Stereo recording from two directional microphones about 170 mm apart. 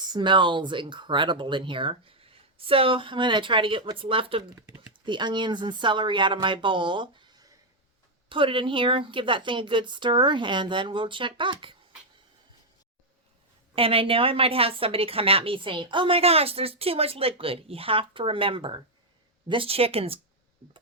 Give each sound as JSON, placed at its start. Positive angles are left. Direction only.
{"t": 0.0, "sound": "speech", "side_deg": -25}
{"t": 4.6, "sound": "speech", "side_deg": -10}
{"t": 4.9, "sound": "speech", "side_deg": -25}
{"t": 13.7, "sound": "speech", "side_deg": -30}